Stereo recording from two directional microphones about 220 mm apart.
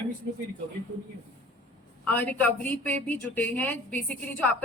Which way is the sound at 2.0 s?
5° left (ahead or behind).